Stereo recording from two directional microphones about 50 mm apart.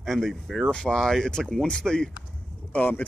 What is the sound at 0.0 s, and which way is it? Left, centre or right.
Speech, centre.